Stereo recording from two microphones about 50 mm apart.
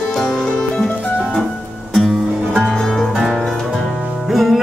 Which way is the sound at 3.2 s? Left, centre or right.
Centre.